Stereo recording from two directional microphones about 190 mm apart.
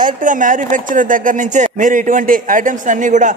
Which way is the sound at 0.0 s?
45° right (ahead or behind).